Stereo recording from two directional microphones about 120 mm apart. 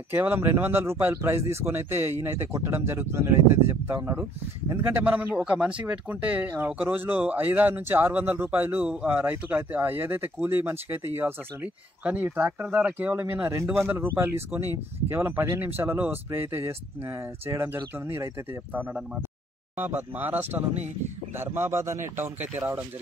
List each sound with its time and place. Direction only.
0.1 s speech: 15° right (ahead or behind)